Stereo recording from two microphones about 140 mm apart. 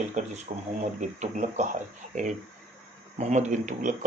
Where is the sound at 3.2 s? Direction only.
55° right (ahead or behind).